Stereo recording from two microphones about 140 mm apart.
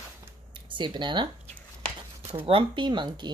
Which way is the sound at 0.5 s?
35° right (ahead or behind).